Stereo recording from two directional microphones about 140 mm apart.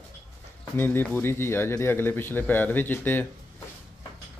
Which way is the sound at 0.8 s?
15° left (ahead or behind).